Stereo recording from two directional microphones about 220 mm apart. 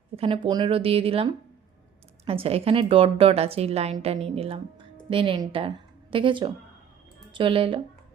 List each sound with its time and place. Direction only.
0.4 s a woman's voice: 25° right (ahead or behind)